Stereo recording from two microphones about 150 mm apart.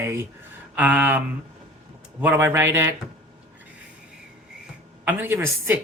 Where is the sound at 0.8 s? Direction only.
10° right (ahead or behind).